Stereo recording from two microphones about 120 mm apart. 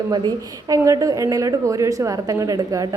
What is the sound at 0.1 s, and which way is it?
A woman's voice, 30° right (ahead or behind).